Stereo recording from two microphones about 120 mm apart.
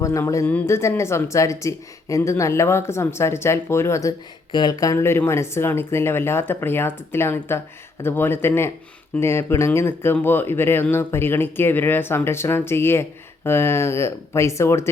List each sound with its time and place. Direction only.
0.0 s speech: 25° left (ahead or behind)